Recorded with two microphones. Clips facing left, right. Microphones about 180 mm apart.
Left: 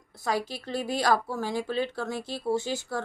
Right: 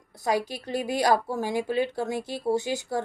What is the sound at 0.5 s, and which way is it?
A woman's voice, 15° right (ahead or behind).